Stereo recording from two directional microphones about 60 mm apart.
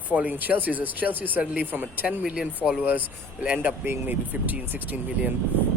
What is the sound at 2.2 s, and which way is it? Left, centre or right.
Speech, centre.